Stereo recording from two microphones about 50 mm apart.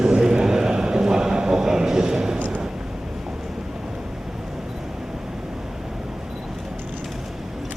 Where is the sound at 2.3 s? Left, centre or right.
Right.